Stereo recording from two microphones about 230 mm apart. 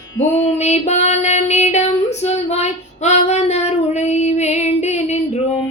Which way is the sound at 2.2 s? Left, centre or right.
Left.